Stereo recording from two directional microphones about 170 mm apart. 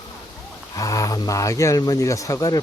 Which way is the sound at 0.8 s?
20° left (ahead or behind).